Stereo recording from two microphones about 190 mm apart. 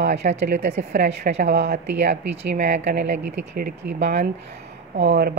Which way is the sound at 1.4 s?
65° right (ahead or behind).